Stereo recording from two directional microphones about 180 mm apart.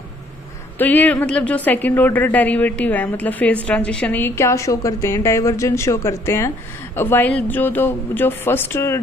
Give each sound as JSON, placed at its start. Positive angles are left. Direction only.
{"t": 0.7, "sound": "a woman's voice", "side_deg": 10}